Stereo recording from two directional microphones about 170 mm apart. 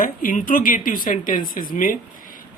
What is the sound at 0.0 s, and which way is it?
Speech, 55° left (ahead or behind).